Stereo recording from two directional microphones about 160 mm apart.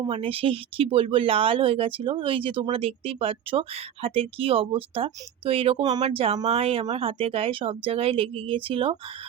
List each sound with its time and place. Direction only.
0.0 s speech: 35° right (ahead or behind)